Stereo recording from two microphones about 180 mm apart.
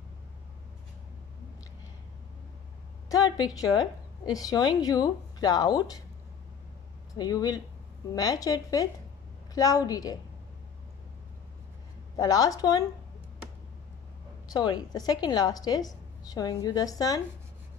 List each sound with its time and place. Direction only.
3.1 s a woman's voice: 20° left (ahead or behind)
7.2 s a woman's voice: 20° left (ahead or behind)
12.2 s a woman's voice: 20° left (ahead or behind)
14.5 s a woman's voice: 25° left (ahead or behind)